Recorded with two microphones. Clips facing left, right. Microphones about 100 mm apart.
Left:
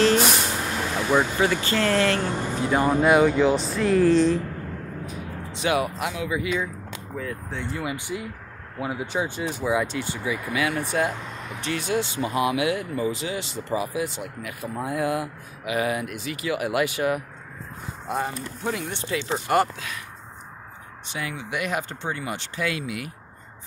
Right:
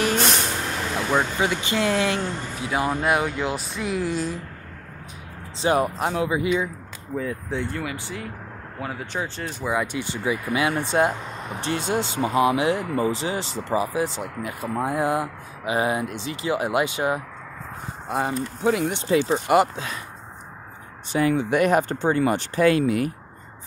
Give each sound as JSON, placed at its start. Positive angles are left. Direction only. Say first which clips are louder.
{"t": 0.2, "sound": "vehicle", "louder": "even", "side_deg": 5}
{"t": 1.4, "sound": "speech", "louder": "left 1 dB", "side_deg": -15}
{"t": 2.2, "sound": "speech", "louder": "left 3 dB", "side_deg": 15}
{"t": 2.5, "sound": "speech", "louder": "left 4 dB", "side_deg": -5}
{"t": 5.6, "sound": "speech", "louder": "right 3 dB", "side_deg": -35}
{"t": 7.2, "sound": "speech", "louder": "right 5 dB", "side_deg": -10}
{"t": 7.7, "sound": "speech", "louder": "left 1 dB", "side_deg": 15}
{"t": 9.9, "sound": "speech", "louder": "right 2 dB", "side_deg": -25}
{"t": 18.7, "sound": "speech", "louder": "right 7 dB", "side_deg": -5}
{"t": 21.1, "sound": "speech", "louder": "right 11 dB", "side_deg": -40}